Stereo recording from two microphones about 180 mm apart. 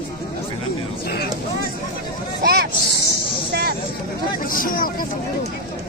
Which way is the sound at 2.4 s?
60° right (ahead or behind).